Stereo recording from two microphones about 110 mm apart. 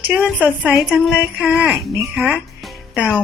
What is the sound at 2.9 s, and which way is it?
Speech, 10° right (ahead or behind).